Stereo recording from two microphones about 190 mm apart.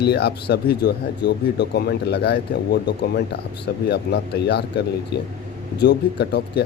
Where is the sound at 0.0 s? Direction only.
60° left (ahead or behind).